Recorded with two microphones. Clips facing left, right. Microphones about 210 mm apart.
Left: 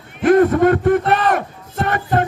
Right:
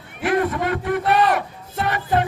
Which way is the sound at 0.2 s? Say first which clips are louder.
Left 9 dB; 45° left (ahead or behind).